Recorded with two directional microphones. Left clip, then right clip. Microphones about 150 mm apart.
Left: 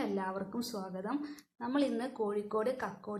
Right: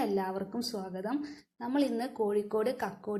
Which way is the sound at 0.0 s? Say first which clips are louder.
Right 4 dB; 15° right (ahead or behind).